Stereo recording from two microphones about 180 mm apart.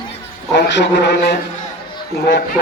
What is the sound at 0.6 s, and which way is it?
A man's voice, 70° left (ahead or behind).